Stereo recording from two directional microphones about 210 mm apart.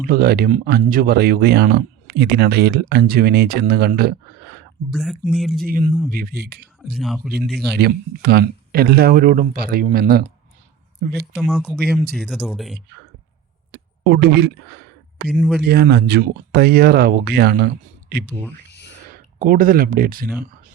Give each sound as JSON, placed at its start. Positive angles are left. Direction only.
{"t": 0.0, "sound": "speech", "side_deg": -45}
{"t": 4.9, "sound": "speech", "side_deg": 0}
{"t": 5.6, "sound": "speech", "side_deg": -40}
{"t": 6.9, "sound": "speech", "side_deg": 0}
{"t": 7.8, "sound": "speech", "side_deg": -50}
{"t": 11.3, "sound": "speech", "side_deg": 0}
{"t": 13.7, "sound": "speech", "side_deg": -55}
{"t": 15.3, "sound": "speech", "side_deg": 0}
{"t": 15.6, "sound": "speech", "side_deg": -50}